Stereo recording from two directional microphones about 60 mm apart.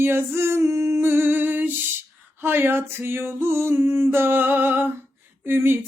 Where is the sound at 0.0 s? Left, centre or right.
Right.